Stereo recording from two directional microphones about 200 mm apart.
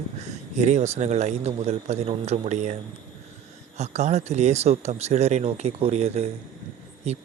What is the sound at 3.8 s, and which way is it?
Speech, 35° right (ahead or behind).